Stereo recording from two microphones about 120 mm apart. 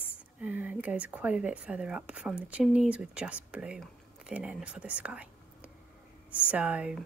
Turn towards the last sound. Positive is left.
turn(degrees=-10)  # may be behind; listen again after turning